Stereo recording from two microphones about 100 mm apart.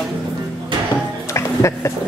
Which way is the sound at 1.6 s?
30° left (ahead or behind).